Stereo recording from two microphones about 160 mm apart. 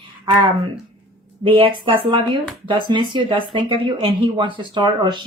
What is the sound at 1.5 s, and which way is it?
Speech, 35° right (ahead or behind).